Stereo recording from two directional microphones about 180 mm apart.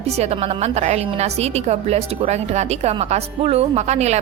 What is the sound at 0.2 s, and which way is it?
A woman's voice, 35° right (ahead or behind).